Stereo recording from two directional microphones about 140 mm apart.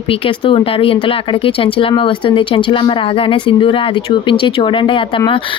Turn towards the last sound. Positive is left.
turn(degrees=40)  # may be behind; listen again after turning